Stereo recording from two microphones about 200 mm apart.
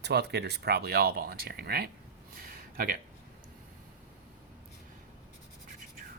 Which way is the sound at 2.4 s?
45° right (ahead or behind).